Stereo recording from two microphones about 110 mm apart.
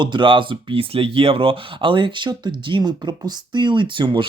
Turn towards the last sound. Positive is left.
turn(degrees=-45)  # may be behind; listen again after turning